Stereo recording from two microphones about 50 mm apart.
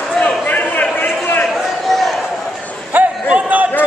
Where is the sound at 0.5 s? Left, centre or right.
Left.